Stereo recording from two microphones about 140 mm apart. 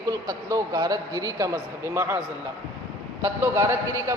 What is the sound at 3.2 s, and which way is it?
Speech, 20° right (ahead or behind).